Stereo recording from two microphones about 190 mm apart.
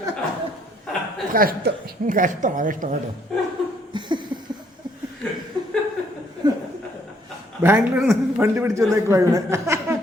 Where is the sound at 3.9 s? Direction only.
25° right (ahead or behind).